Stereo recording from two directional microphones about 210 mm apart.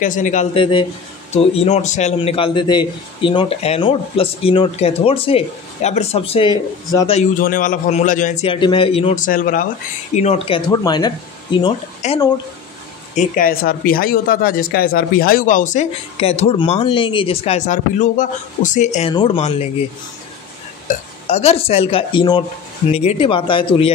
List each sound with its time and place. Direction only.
0.0 s a man's voice: 35° left (ahead or behind); by 7.2 s 20° left (ahead or behind)
7.2 s a man's voice: 40° left (ahead or behind); by 11.7 s 20° left (ahead or behind)
12.0 s speech: 35° left (ahead or behind)
21.3 s a man's voice: 30° left (ahead or behind)